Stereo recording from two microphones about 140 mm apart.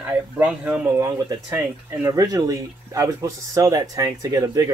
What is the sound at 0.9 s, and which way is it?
Speech, 25° right (ahead or behind).